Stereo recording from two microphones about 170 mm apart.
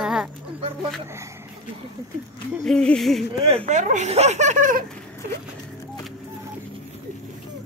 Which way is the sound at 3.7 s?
45° right (ahead or behind).